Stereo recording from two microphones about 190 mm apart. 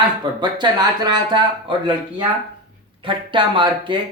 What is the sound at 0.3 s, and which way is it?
Speech, 25° right (ahead or behind).